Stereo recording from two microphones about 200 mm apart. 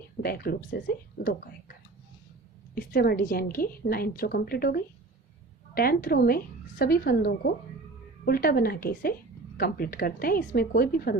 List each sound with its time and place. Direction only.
0.2 s a woman's voice: 50° left (ahead or behind)
2.7 s a woman's voice: 50° left (ahead or behind)